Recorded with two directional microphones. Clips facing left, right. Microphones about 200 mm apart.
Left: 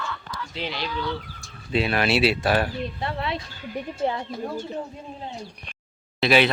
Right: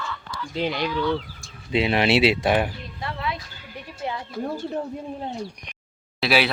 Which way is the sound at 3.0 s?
30° left (ahead or behind).